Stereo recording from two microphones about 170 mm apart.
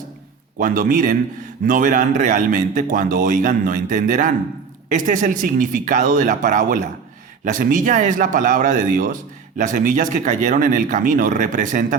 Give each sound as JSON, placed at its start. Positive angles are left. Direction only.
{"t": 0.6, "sound": "a man's voice", "side_deg": -55}